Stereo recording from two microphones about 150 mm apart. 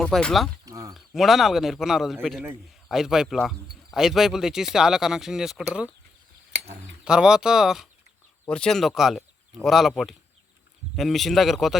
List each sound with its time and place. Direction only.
0.0 s speech: 5° left (ahead or behind)
0.6 s a sound: 20° right (ahead or behind)
0.9 s speech: centre (ahead or behind)
7.0 s speech: 5° right (ahead or behind)